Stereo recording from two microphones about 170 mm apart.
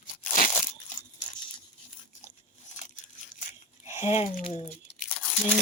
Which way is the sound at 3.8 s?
40° left (ahead or behind).